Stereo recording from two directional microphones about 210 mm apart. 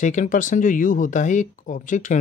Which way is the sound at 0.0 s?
35° left (ahead or behind).